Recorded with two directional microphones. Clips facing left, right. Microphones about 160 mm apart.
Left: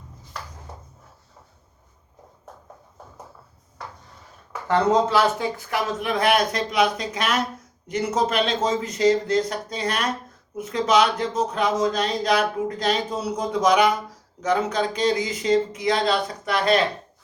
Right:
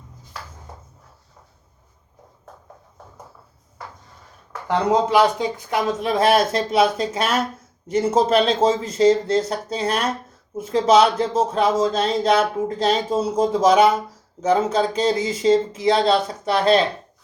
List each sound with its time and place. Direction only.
4.7 s speech: 15° right (ahead or behind); by 16.8 s 30° right (ahead or behind)